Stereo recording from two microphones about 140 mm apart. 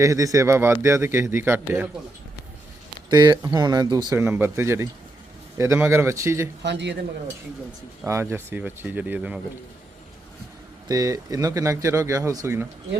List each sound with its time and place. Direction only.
0.0 s a man's voice: 25° right (ahead or behind)
3.1 s a man's voice: 30° right (ahead or behind)
4.1 s a man's voice: 15° right (ahead or behind)
8.0 s speech: 20° right (ahead or behind)
10.8 s a man's voice: 25° right (ahead or behind)